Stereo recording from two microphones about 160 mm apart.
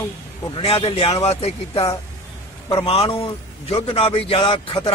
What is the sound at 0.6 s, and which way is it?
Speech, 40° left (ahead or behind).